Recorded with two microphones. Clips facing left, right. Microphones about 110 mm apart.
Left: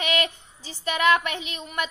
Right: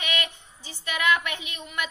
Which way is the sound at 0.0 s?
40° left (ahead or behind).